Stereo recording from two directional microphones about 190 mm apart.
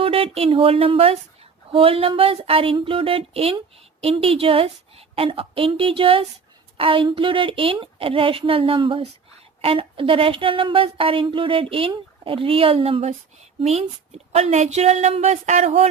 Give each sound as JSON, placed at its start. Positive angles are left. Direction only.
{"t": 0.0, "sound": "a woman's voice", "side_deg": -30}